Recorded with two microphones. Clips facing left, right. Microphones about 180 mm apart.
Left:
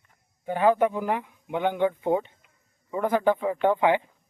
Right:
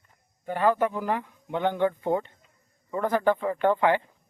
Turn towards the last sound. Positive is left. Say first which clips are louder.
# left 1 dB
turn(degrees=15)  # may be behind; listen again after turning